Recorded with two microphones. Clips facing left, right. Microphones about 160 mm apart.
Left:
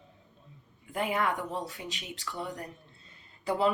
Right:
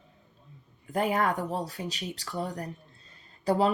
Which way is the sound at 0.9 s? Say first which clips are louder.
Right 3 dB; 40° right (ahead or behind).